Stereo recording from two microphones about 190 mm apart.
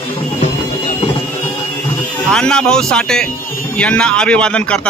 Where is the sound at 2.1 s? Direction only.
5° left (ahead or behind).